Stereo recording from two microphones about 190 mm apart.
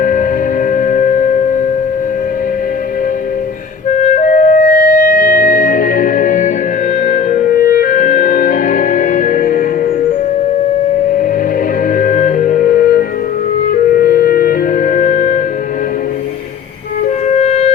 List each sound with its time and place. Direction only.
0.0 s music: 45° left (ahead or behind)
3.9 s clarinet: 35° left (ahead or behind)
11.9 s music: 45° left (ahead or behind)
17.2 s music: 40° left (ahead or behind)